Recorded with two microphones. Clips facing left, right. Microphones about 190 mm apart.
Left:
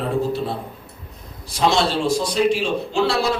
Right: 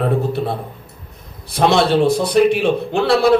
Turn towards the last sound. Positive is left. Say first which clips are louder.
# right 6 dB
turn(degrees=-60)  # may be behind; listen again after turning